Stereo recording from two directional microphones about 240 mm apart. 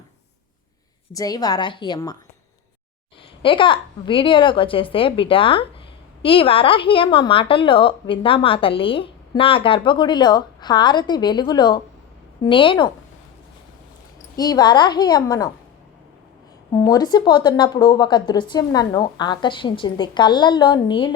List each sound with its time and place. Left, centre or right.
1.1 s a woman's voice: centre
3.4 s speech: left
14.3 s a woman's voice: centre
16.7 s a woman's voice: centre